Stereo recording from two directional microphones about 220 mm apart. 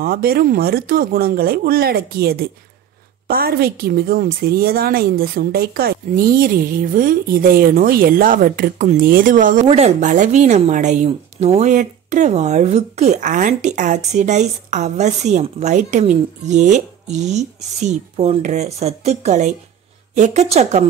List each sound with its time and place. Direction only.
0.0 s speech: 40° right (ahead or behind)